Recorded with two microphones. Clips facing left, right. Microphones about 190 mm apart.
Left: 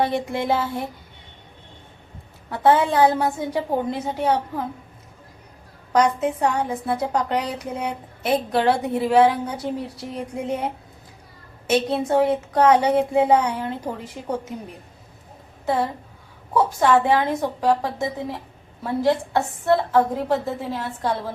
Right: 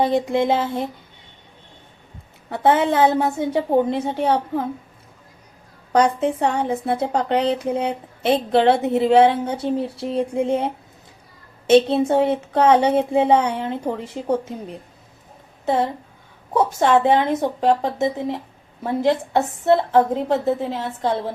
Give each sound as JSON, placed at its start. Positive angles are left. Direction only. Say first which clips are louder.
{"t": 0.0, "sound": "a woman's voice", "louder": "right 4 dB", "side_deg": -20}
{"t": 2.5, "sound": "a woman's voice", "louder": "right 1 dB", "side_deg": -20}
{"t": 5.9, "sound": "a woman's voice", "louder": "right 2 dB", "side_deg": -30}
{"t": 15.6, "sound": "a woman's voice", "louder": "right 2 dB", "side_deg": -20}